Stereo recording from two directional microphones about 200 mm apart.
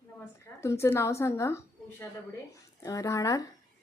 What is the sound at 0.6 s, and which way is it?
Speech, 15° left (ahead or behind).